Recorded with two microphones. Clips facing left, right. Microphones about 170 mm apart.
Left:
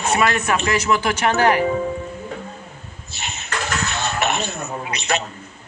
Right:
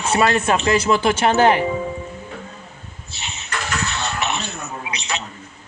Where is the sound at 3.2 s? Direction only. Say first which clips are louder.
Left 2 dB; 55° left (ahead or behind).